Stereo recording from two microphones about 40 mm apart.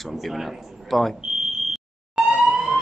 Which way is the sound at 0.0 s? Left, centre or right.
Centre.